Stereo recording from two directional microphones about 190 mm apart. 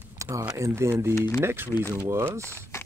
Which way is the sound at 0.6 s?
15° right (ahead or behind).